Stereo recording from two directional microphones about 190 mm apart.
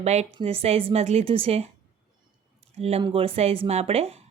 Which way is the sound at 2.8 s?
30° right (ahead or behind).